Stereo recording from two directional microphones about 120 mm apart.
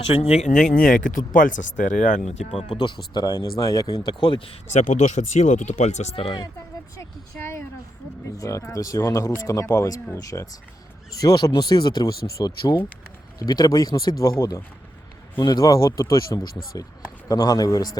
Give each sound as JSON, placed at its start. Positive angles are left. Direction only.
{"t": 0.0, "sound": "speech", "side_deg": 60}
{"t": 2.7, "sound": "speech", "side_deg": 40}
{"t": 4.2, "sound": "speech", "side_deg": 45}
{"t": 4.7, "sound": "speech", "side_deg": 75}
{"t": 7.3, "sound": "speech", "side_deg": 10}
{"t": 8.4, "sound": "speech", "side_deg": 25}